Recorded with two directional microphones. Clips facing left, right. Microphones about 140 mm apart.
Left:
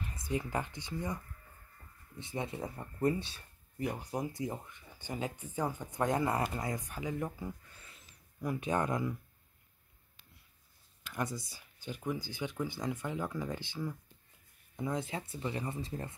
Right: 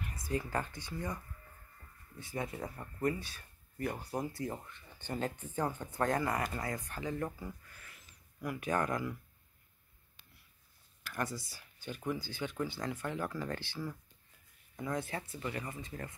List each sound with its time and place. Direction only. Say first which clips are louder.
0.0 s speech: left 1 dB; 20° left (ahead or behind)
3.7 s speech: left 1 dB; 15° left (ahead or behind)
11.3 s speech: left 1 dB; 20° left (ahead or behind)